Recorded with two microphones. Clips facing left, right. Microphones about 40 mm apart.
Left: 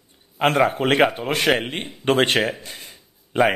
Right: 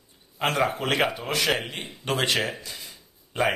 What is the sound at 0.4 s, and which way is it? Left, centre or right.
A man's voice, left.